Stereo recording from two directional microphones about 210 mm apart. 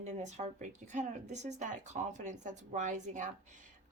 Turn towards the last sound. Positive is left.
turn(degrees=-35)  # may be behind; listen again after turning